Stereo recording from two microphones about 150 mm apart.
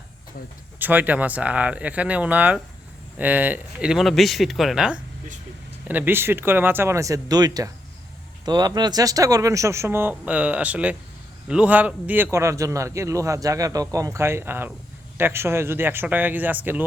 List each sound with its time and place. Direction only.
0.8 s a man's voice: 10° right (ahead or behind)